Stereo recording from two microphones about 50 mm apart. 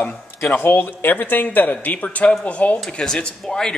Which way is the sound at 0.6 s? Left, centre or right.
Left.